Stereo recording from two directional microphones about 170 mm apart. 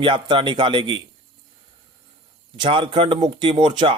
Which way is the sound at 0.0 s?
30° right (ahead or behind).